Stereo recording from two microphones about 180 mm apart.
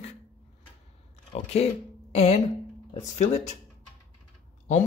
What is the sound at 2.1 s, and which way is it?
Speech, 35° left (ahead or behind).